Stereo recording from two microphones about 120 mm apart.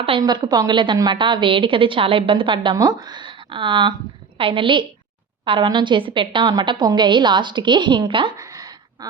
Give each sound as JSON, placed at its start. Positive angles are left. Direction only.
{"t": 0.2, "sound": "a woman's voice", "side_deg": -35}
{"t": 2.7, "sound": "a woman's voice", "side_deg": -30}
{"t": 8.4, "sound": "a sound", "side_deg": -30}